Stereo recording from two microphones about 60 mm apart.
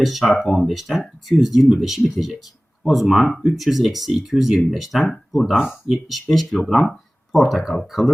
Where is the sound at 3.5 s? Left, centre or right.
Centre.